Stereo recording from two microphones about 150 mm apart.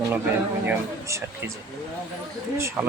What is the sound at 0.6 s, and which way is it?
Speech, 15° right (ahead or behind).